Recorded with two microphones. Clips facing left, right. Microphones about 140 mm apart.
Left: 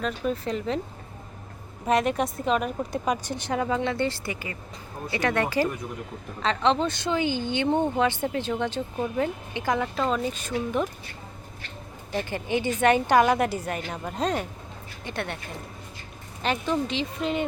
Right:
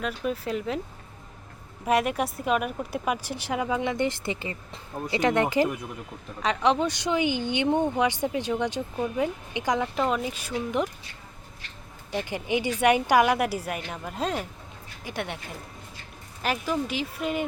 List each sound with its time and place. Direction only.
0.0 s speech: 5° right (ahead or behind)
1.9 s speech: 10° right (ahead or behind)
9.1 s speech: 15° right (ahead or behind)
12.1 s speech: 15° right (ahead or behind)
16.4 s speech: 5° right (ahead or behind)